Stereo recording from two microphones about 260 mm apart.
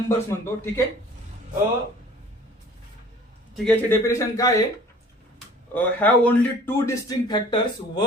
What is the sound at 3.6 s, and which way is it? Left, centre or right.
Speech, centre.